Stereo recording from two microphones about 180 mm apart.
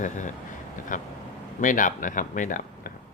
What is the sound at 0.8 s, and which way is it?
Vehicle, 45° left (ahead or behind).